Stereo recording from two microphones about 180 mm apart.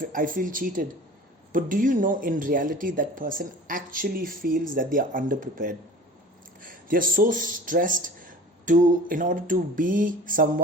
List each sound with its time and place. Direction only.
0.0 s speech: 50° right (ahead or behind)